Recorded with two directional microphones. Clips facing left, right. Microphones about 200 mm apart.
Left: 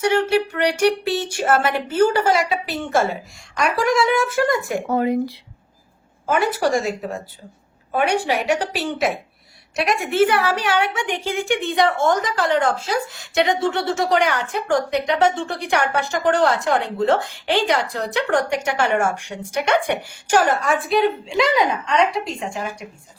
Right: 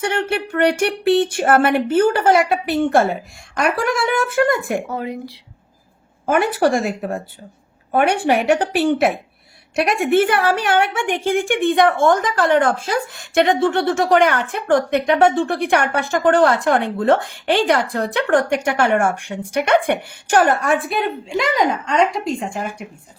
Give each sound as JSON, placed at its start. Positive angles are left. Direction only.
{"t": 0.0, "sound": "a woman's voice", "side_deg": -55}
{"t": 4.9, "sound": "a woman's voice", "side_deg": 50}
{"t": 6.2, "sound": "a woman's voice", "side_deg": -55}
{"t": 21.5, "sound": "a woman's voice", "side_deg": -45}